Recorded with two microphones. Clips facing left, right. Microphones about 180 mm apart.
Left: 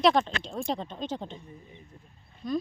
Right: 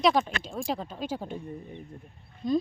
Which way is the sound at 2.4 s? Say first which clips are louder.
Right 4 dB; 20° right (ahead or behind).